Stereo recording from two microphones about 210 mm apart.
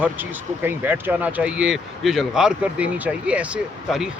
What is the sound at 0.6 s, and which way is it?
Speech, 10° right (ahead or behind).